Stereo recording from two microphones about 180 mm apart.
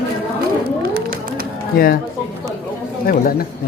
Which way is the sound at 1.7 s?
55° left (ahead or behind).